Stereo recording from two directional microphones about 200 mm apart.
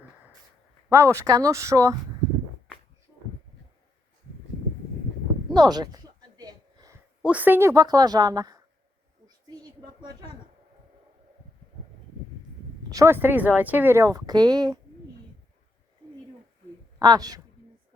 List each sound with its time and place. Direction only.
0.9 s speech: 15° right (ahead or behind)
5.5 s a sound: 20° right (ahead or behind)
7.3 s a woman's voice: 10° right (ahead or behind)
9.5 s a sound: 20° right (ahead or behind)
12.9 s speech: 15° right (ahead or behind)
17.0 s a woman's voice: 20° right (ahead or behind)